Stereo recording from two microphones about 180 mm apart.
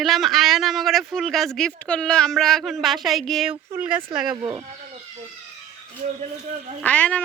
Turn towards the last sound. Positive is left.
turn(degrees=10)  # may be behind; listen again after turning